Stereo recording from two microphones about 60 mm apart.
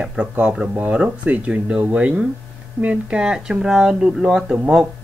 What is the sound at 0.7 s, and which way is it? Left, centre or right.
Speech, right.